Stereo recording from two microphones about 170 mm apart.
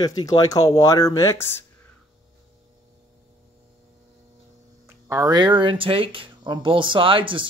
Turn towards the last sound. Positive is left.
turn(degrees=-30)  # may be behind; listen again after turning